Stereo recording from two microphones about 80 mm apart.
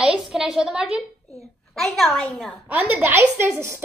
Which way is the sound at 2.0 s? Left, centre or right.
Left.